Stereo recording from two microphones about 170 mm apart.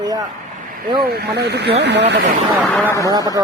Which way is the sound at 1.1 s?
75° right (ahead or behind).